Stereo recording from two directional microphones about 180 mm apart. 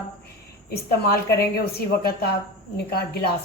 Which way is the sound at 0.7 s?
60° left (ahead or behind).